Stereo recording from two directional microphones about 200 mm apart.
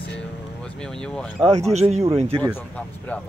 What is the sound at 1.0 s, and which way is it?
Speech, 5° left (ahead or behind).